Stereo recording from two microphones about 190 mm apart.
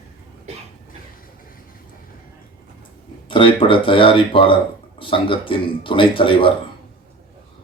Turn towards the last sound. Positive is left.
turn(degrees=25)  # may be behind; listen again after turning